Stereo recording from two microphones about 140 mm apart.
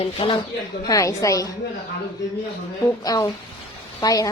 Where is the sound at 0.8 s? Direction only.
25° left (ahead or behind).